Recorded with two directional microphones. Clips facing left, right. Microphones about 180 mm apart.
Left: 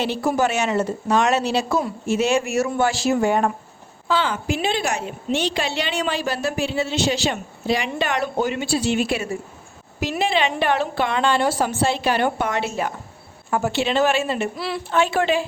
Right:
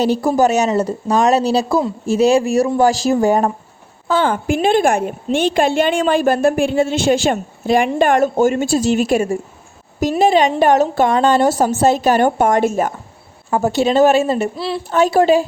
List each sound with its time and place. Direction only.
0.0 s speech: 40° right (ahead or behind)
4.1 s a woman's voice: 50° right (ahead or behind)
14.5 s a woman's voice: 25° right (ahead or behind)
14.8 s speech: 40° right (ahead or behind)